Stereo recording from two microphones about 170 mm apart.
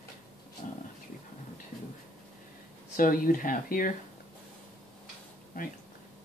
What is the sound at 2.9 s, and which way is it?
Speech, 55° left (ahead or behind).